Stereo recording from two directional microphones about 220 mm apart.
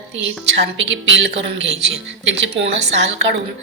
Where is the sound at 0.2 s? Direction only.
55° right (ahead or behind).